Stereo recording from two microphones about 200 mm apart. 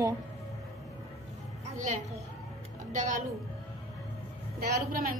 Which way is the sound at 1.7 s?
35° right (ahead or behind).